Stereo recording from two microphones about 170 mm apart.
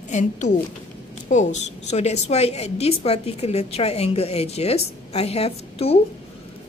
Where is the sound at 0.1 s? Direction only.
45° left (ahead or behind).